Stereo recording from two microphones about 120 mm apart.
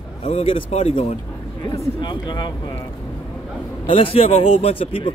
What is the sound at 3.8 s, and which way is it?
A man's voice, 50° left (ahead or behind).